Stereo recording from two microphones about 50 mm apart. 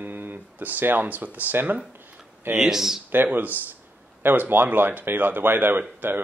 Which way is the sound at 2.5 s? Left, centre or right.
Centre.